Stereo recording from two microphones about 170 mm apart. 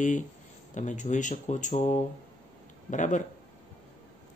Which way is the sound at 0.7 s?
45° left (ahead or behind).